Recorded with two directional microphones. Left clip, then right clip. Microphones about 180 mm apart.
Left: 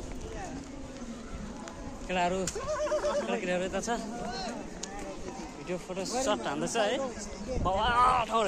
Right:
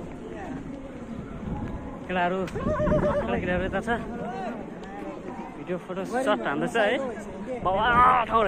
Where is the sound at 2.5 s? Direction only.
45° left (ahead or behind).